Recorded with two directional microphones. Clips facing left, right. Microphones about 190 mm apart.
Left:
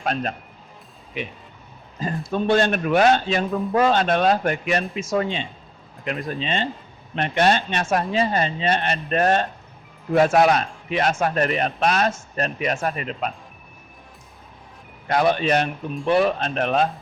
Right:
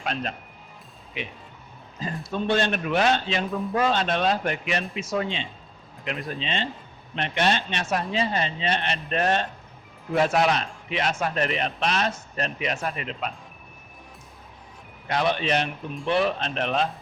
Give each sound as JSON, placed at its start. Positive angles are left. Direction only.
{"t": 0.0, "sound": "speech", "side_deg": 45}
{"t": 2.3, "sound": "speech", "side_deg": 50}
{"t": 15.0, "sound": "speech", "side_deg": 45}